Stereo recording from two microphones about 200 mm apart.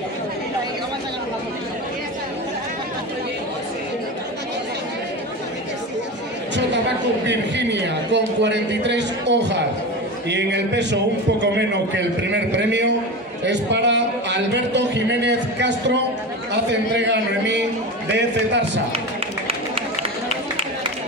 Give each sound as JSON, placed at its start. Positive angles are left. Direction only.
{"t": 7.2, "sound": "a man's voice", "side_deg": -60}